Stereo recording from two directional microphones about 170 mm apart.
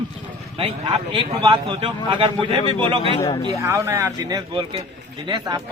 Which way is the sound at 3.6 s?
15° right (ahead or behind).